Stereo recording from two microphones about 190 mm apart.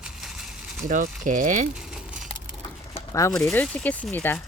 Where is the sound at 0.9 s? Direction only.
45° right (ahead or behind).